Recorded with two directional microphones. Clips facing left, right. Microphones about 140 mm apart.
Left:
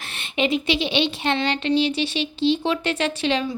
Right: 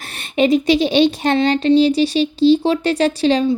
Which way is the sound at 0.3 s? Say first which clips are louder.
Right 8 dB; 40° right (ahead or behind).